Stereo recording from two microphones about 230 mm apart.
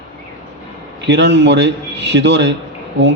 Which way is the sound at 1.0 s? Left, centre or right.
Right.